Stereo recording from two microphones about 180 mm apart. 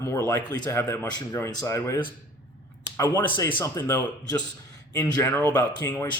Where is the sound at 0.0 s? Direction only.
15° left (ahead or behind).